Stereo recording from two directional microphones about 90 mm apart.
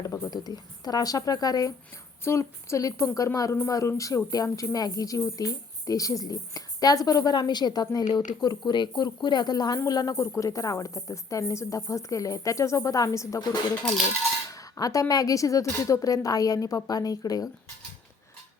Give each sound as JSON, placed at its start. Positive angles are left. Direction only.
{"t": 0.0, "sound": "speech", "side_deg": 40}
{"t": 2.2, "sound": "speech", "side_deg": 30}